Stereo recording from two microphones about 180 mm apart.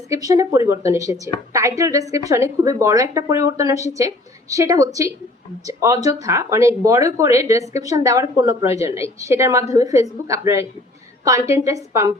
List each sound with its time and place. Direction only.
0.1 s a woman's voice: 20° right (ahead or behind)